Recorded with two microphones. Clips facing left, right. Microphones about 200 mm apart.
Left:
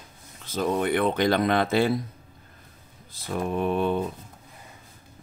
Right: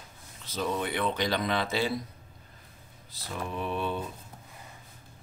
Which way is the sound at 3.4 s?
50° left (ahead or behind).